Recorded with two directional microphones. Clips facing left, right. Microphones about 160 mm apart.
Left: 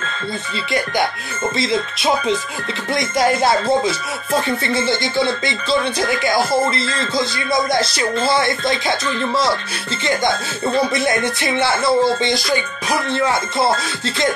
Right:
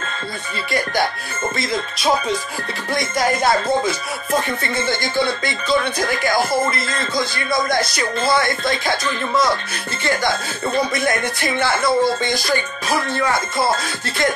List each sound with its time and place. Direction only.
2.9 s speech: 25° left (ahead or behind)